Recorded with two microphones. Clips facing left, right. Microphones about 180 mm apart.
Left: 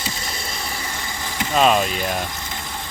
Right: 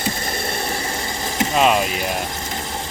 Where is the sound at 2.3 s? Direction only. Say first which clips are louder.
Right 4 dB; 35° right (ahead or behind).